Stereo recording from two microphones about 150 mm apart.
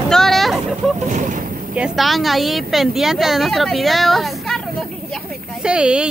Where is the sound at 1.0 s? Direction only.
55° right (ahead or behind).